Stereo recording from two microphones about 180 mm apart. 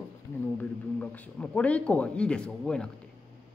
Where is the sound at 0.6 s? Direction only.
10° left (ahead or behind).